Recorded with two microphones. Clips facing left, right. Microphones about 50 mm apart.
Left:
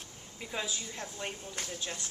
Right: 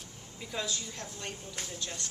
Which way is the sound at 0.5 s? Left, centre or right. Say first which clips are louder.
Right 1 dB; centre.